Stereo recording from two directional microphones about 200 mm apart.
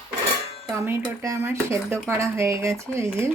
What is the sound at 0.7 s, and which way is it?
Speech, 15° right (ahead or behind).